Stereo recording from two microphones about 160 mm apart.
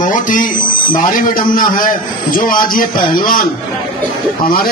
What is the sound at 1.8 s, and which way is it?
A man's voice, 60° left (ahead or behind).